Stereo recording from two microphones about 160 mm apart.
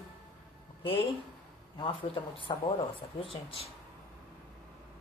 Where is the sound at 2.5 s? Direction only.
25° left (ahead or behind).